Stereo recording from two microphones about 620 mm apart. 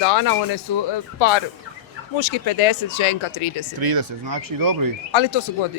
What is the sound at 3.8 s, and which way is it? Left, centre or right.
Speech, right.